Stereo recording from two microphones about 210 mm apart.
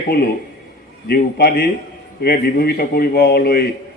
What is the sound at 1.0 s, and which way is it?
A man's voice, 50° left (ahead or behind).